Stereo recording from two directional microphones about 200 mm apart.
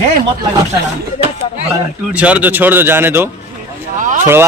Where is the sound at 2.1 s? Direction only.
5° right (ahead or behind).